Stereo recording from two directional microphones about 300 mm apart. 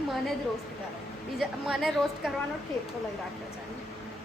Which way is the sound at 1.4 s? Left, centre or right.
Centre.